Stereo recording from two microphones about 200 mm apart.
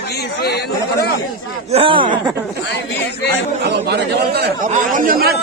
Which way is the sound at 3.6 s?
55° right (ahead or behind).